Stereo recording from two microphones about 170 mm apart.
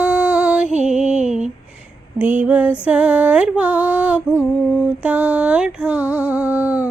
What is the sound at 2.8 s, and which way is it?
Music, 10° right (ahead or behind).